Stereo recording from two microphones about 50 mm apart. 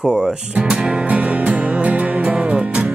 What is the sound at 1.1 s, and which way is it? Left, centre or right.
Music, right.